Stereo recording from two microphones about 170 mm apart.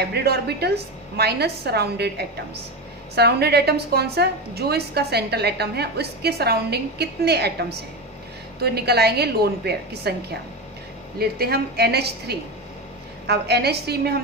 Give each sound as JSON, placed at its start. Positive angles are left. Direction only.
{"t": 0.1, "sound": "a woman's voice", "side_deg": -70}
{"t": 8.5, "sound": "a woman's voice", "side_deg": -70}
{"t": 11.1, "sound": "a woman's voice", "side_deg": -65}